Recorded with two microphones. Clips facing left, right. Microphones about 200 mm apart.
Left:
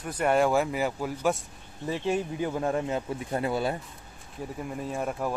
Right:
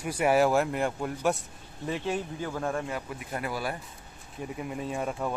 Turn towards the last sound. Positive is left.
turn(degrees=0)  # may be behind; listen again after turning